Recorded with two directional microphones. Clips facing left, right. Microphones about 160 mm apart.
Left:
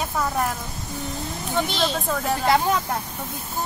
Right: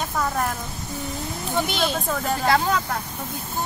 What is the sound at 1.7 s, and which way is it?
Speech, 5° right (ahead or behind).